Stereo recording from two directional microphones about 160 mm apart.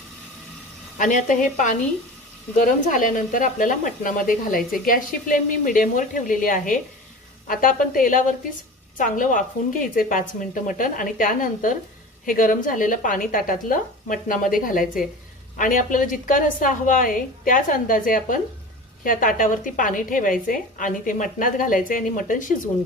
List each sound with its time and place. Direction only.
0.9 s a woman's voice: 55° left (ahead or behind)